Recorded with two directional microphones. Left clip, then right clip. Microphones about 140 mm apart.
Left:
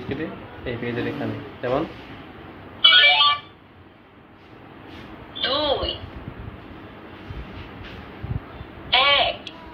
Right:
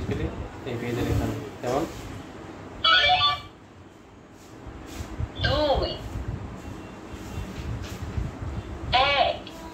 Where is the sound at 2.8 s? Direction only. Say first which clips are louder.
Left 5 dB; 5° left (ahead or behind).